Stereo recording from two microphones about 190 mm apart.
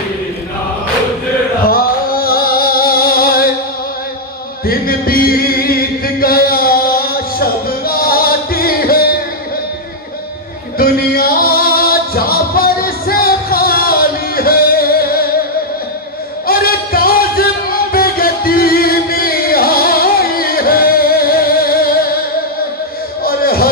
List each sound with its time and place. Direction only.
1.7 s music: 50° left (ahead or behind)
4.6 s music: 50° left (ahead or behind)
10.8 s music: 50° left (ahead or behind)
16.4 s music: 50° left (ahead or behind)
23.2 s a sound: 50° left (ahead or behind)